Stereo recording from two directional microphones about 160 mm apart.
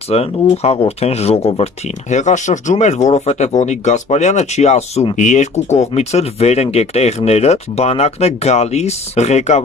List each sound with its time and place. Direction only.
0.1 s speech: 40° left (ahead or behind)